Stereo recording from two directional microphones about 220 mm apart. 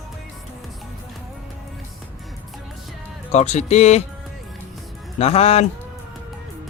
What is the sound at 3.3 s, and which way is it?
Speech, 30° left (ahead or behind).